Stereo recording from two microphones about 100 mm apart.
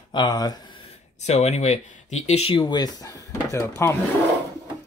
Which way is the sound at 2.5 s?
50° left (ahead or behind).